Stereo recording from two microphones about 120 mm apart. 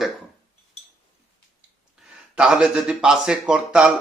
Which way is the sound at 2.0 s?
10° right (ahead or behind).